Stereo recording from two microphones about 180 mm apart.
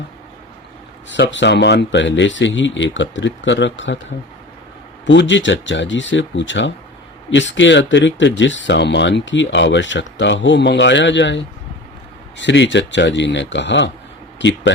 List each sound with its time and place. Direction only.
1.1 s speech: 90° left
5.0 s speech: 90° left